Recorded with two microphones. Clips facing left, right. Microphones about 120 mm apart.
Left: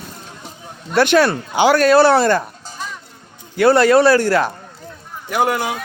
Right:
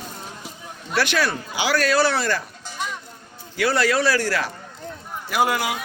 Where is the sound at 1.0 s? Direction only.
55° left (ahead or behind).